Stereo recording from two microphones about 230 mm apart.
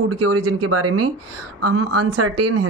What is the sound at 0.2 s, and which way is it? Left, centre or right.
A woman's voice, right.